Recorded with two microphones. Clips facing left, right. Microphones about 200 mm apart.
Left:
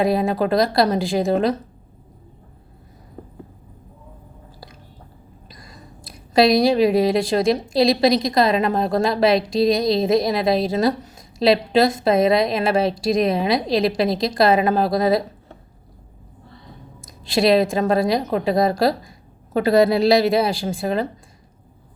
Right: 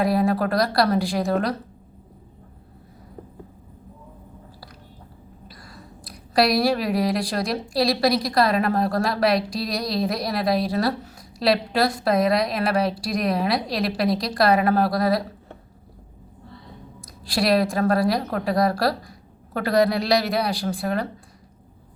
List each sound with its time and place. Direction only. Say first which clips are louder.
0.0 s a woman's voice: left 2 dB; 25° left (ahead or behind)
6.3 s a woman's voice: left 5 dB; 25° left (ahead or behind)
17.2 s a woman's voice: left 4 dB; 25° left (ahead or behind)